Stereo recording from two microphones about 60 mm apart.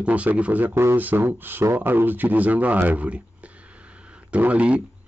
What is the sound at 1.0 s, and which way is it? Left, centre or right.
Speech, right.